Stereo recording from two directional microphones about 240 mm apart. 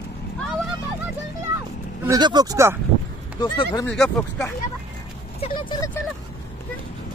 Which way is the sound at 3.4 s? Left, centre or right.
Centre.